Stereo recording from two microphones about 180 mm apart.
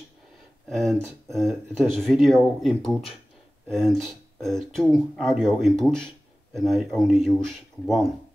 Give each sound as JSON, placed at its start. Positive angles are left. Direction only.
{"t": 0.7, "sound": "speech", "side_deg": 0}